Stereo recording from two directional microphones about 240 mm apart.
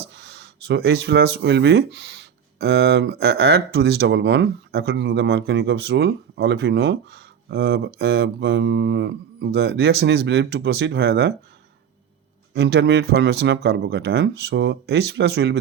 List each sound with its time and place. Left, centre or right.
0.0 s speech: right
12.5 s speech: right